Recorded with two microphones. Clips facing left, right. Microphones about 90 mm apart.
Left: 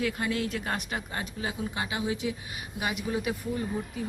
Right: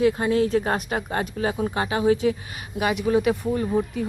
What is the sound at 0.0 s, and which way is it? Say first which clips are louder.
Speech: right 10 dB; 30° right (ahead or behind).